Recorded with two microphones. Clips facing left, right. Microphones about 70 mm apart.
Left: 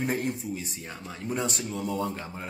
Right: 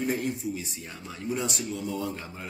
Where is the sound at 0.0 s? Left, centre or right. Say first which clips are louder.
Even; left.